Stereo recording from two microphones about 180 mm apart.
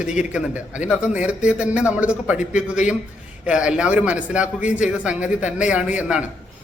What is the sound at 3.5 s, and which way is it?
A man's voice, 5° right (ahead or behind).